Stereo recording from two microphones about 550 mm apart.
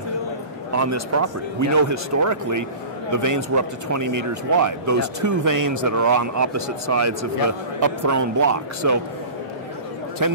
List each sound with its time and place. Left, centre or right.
0.7 s speech: right
10.2 s speech: right